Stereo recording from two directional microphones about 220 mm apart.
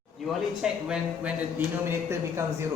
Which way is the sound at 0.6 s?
5° right (ahead or behind).